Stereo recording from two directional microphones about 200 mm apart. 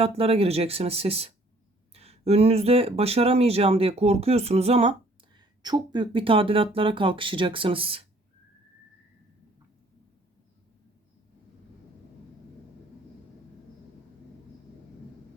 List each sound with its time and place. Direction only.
0.2 s speech: 30° right (ahead or behind)